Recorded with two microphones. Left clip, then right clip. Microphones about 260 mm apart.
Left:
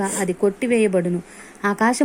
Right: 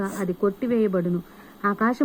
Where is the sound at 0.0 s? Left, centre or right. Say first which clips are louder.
Left 4 dB; centre.